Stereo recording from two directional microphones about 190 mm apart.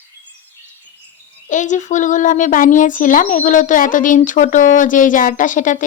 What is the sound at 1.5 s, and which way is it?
A woman's voice, 40° left (ahead or behind).